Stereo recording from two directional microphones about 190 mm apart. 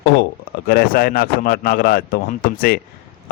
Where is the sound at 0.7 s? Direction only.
50° left (ahead or behind).